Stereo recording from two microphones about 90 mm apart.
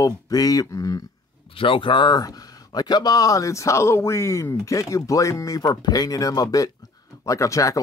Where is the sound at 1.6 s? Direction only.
70° left (ahead or behind).